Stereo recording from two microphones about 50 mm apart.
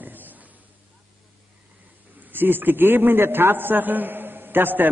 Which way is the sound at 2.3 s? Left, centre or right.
Right.